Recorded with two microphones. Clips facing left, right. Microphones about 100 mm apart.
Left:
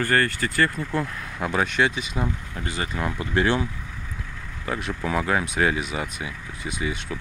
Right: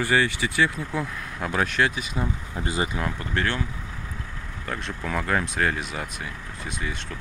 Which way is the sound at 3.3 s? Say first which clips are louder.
Left 6 dB; 15° left (ahead or behind).